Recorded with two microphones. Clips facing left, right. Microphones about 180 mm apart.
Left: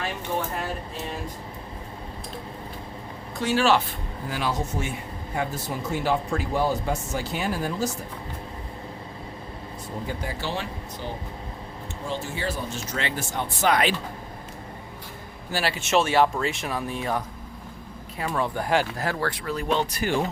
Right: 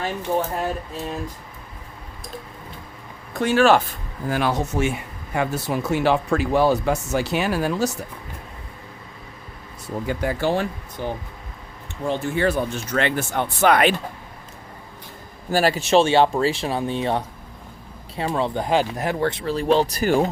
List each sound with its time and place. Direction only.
3.3 s speech: 55° right (ahead or behind); by 7.9 s 75° right (ahead or behind)
10.1 s speech: 80° right
10.4 s speech: 50° right (ahead or behind)
12.0 s speech: 60° right (ahead or behind)
15.5 s speech: 40° right (ahead or behind)